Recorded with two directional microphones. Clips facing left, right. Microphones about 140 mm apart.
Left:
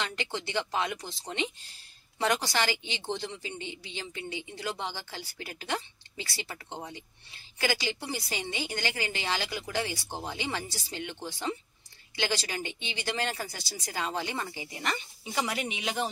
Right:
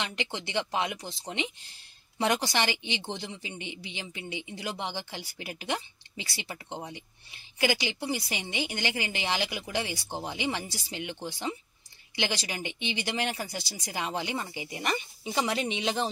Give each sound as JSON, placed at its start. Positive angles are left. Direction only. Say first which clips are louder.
{"t": 0.0, "sound": "speech", "louder": "even", "side_deg": -20}